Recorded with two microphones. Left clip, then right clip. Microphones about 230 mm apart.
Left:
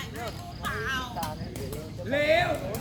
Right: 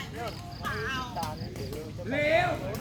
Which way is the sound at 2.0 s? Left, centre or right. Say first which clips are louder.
Left 2 dB; left.